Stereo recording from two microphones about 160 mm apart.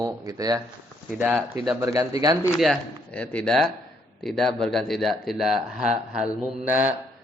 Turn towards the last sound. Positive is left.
turn(degrees=-10)  # may be behind; listen again after turning